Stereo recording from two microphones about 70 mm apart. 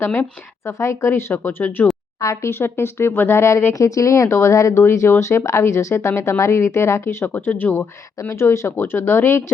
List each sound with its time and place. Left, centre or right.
0.0 s speech: left
0.6 s speech: left
1.3 s speech: left
2.2 s speech: left
8.2 s speech: left